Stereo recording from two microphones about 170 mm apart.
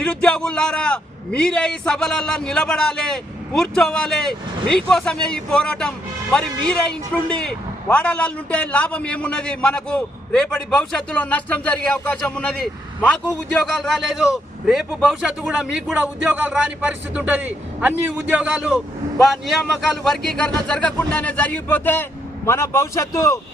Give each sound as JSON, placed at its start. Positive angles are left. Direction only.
{"t": 0.0, "sound": "a man's voice", "side_deg": 5}
{"t": 20.1, "sound": "a man's voice", "side_deg": 5}